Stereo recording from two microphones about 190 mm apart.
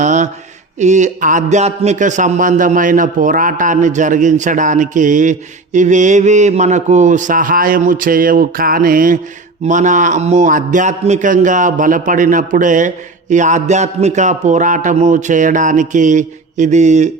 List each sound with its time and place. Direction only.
0.0 s mantra: 40° right (ahead or behind)
0.8 s a man's voice: 40° right (ahead or behind)